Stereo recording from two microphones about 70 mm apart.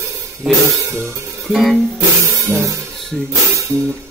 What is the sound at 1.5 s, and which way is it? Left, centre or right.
Speech, centre.